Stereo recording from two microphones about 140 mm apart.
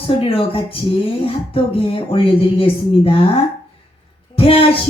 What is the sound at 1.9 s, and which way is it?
Speech, 40° left (ahead or behind).